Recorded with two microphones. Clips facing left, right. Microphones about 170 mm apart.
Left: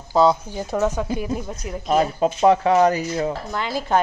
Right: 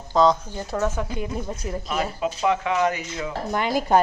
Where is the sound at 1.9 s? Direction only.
40° left (ahead or behind).